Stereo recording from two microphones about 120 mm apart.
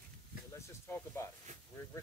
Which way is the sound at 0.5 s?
20° left (ahead or behind).